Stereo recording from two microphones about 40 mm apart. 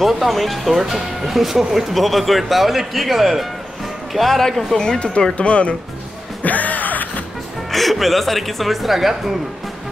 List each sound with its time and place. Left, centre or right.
0.0 s speech: centre
4.7 s speech: left
6.4 s music: left
7.7 s speech: centre